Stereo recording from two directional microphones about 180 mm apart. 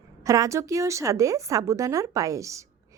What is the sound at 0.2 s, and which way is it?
A woman's voice, 20° right (ahead or behind).